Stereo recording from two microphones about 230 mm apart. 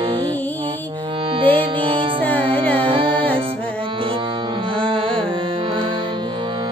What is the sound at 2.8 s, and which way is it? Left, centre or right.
Music, right.